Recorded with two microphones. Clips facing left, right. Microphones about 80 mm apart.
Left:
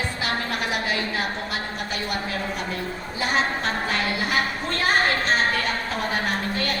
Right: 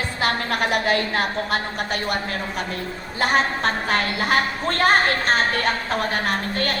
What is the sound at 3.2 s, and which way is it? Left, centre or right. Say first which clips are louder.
A woman's voice: right 4 dB; right.